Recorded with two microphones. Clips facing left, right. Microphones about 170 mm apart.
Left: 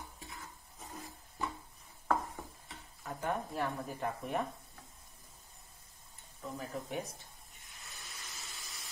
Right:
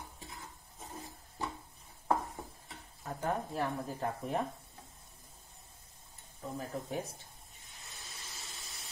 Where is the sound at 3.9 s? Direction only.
30° right (ahead or behind).